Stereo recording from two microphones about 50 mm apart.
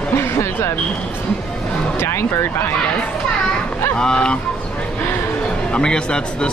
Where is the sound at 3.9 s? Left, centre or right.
Centre.